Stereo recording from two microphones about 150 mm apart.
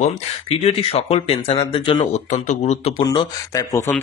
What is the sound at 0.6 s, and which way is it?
Speech, 40° left (ahead or behind).